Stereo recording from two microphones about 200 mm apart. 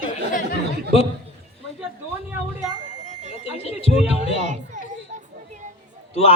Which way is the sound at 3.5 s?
30° left (ahead or behind).